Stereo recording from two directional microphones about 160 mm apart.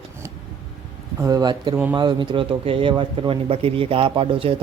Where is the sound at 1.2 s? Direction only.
25° right (ahead or behind).